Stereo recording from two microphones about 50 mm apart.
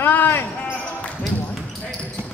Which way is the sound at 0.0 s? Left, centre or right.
Left.